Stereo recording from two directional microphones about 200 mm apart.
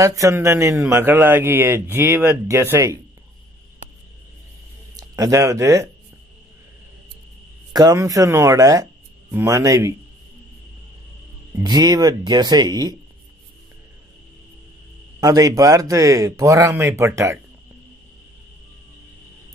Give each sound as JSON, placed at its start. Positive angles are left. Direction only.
{"t": 0.0, "sound": "a man's voice", "side_deg": -15}
{"t": 4.9, "sound": "speech", "side_deg": -20}
{"t": 7.7, "sound": "a man's voice", "side_deg": -20}
{"t": 11.5, "sound": "speech", "side_deg": -20}
{"t": 15.1, "sound": "a man's voice", "side_deg": -15}